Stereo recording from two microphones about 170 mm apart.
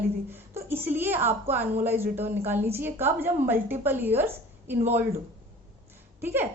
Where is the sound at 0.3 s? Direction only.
10° right (ahead or behind).